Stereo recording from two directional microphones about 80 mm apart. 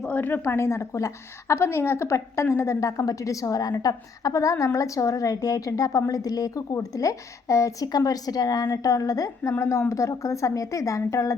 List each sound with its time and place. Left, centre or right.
0.1 s a woman's voice: left